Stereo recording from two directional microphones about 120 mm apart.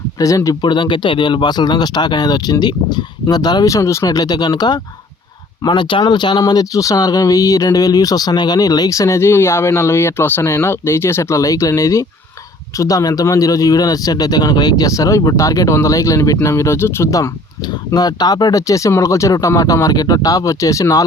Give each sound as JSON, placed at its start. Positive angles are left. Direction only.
{"t": 0.2, "sound": "speech", "side_deg": 25}
{"t": 0.6, "sound": "speech", "side_deg": 40}